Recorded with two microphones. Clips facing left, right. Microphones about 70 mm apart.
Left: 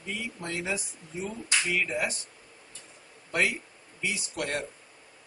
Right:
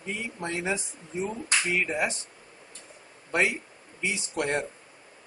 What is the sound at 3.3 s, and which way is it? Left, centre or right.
Speech, right.